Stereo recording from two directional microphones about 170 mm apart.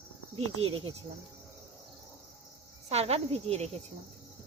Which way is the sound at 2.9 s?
35° right (ahead or behind).